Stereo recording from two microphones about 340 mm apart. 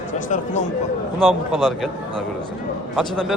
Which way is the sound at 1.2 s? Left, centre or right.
Centre.